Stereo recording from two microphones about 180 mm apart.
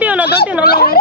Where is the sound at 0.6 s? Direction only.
60° left (ahead or behind).